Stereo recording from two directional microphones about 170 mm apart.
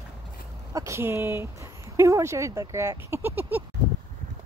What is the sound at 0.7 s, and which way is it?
Speech, 15° right (ahead or behind).